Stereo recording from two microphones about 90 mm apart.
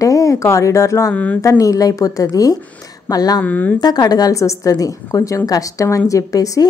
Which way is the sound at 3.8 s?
45° left (ahead or behind).